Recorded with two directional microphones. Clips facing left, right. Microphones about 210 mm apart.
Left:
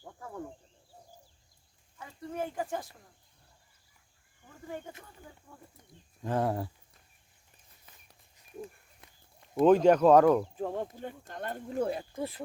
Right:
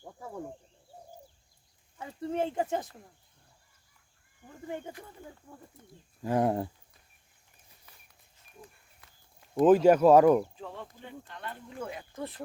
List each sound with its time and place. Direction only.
0.0 s a sound: 15° right (ahead or behind)
2.0 s speech: 25° right (ahead or behind)
4.7 s speech: 20° right (ahead or behind)
6.2 s speech: 15° right (ahead or behind)
9.0 s walk: 25° left (ahead or behind)
9.4 s speech: 5° right (ahead or behind)
10.5 s speech: 50° left (ahead or behind)
12.1 s speech: 10° left (ahead or behind)